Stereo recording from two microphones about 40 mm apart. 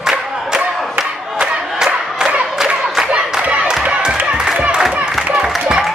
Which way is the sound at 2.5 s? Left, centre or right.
Centre.